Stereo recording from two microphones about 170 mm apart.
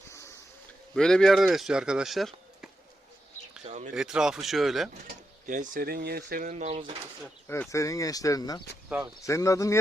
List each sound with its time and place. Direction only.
0.9 s speech: 5° left (ahead or behind)
3.6 s bird: 40° right (ahead or behind)
3.9 s speech: 5° right (ahead or behind)
5.0 s speech: 50° right (ahead or behind)
6.5 s speech: 40° right (ahead or behind)
7.4 s speech: 15° left (ahead or behind)